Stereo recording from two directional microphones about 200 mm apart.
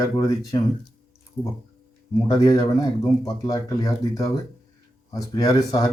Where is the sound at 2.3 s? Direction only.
20° left (ahead or behind).